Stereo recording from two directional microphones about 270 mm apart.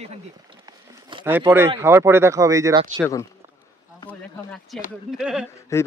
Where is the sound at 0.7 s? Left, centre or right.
Centre.